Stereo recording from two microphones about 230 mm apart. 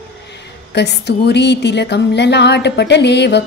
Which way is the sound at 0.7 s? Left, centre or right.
Left.